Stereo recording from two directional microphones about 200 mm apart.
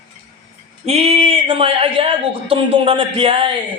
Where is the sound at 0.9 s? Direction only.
30° right (ahead or behind).